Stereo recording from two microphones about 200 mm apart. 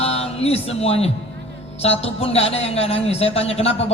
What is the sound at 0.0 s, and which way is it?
Music, 30° left (ahead or behind).